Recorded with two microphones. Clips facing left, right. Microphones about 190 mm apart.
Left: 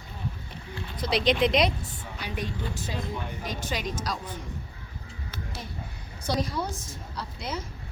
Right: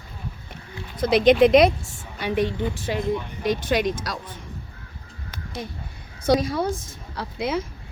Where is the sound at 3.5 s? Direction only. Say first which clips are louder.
Right 13 dB; 85° right.